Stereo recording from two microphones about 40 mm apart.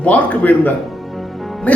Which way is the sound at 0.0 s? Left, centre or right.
Left.